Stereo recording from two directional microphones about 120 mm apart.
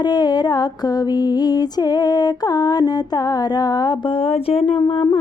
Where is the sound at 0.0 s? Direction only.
35° left (ahead or behind).